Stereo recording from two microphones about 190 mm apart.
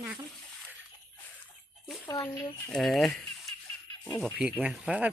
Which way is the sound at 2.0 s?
15° left (ahead or behind).